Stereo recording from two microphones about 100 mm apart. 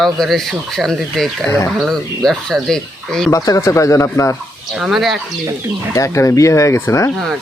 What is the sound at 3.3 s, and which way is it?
Speech, 35° left (ahead or behind).